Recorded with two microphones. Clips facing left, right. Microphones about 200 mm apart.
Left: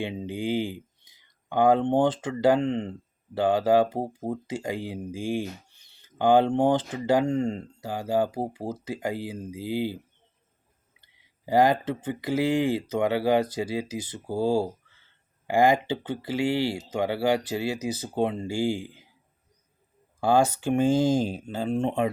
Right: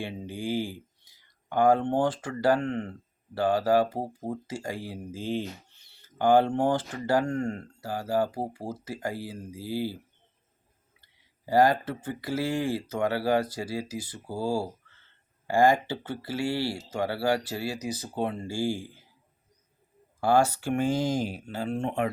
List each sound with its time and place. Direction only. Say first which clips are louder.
0.0 s speech: left 4 dB; 20° left (ahead or behind)
11.0 s speech: left 3 dB; 20° left (ahead or behind)
20.2 s speech: left 1 dB; 20° left (ahead or behind)